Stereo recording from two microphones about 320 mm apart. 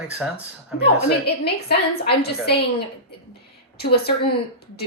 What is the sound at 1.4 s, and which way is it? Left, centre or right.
A woman's voice, left.